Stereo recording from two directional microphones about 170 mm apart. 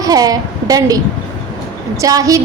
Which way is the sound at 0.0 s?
20° right (ahead or behind).